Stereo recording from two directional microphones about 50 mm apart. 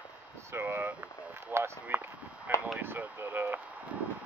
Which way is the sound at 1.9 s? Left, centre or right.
Right.